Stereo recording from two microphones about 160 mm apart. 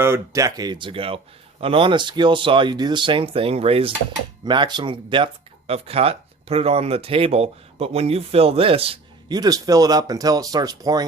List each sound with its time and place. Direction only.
0.0 s speech: 20° right (ahead or behind); by 9.4 s 35° right (ahead or behind)
9.4 s speech: 25° right (ahead or behind)